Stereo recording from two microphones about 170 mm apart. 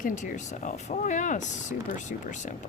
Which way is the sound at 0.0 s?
50° left (ahead or behind).